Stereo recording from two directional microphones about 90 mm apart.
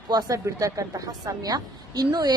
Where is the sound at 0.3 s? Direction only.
40° right (ahead or behind).